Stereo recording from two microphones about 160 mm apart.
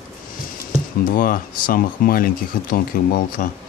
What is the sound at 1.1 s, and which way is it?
Speech, 65° left (ahead or behind).